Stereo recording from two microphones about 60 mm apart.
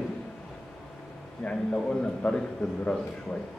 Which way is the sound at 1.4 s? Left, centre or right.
Centre.